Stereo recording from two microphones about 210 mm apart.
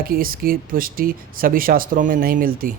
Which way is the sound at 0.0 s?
45° right (ahead or behind).